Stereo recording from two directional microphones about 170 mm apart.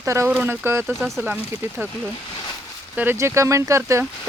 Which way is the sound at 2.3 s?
25° left (ahead or behind).